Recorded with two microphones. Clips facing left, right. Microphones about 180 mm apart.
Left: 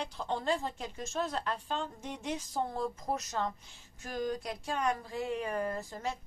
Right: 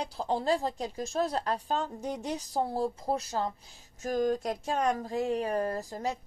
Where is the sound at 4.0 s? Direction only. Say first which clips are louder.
Right 7 dB; 45° right (ahead or behind).